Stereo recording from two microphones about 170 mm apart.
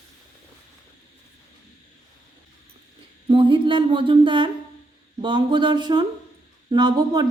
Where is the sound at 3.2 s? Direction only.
30° right (ahead or behind).